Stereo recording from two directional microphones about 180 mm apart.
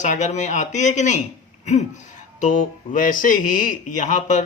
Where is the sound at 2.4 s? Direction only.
45° left (ahead or behind).